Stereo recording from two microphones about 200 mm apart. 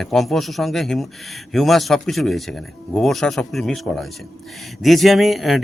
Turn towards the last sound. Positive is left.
turn(degrees=0)  # may be behind; listen again after turning